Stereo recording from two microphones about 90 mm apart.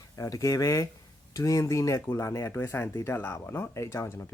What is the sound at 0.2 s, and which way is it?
Speech, 40° left (ahead or behind).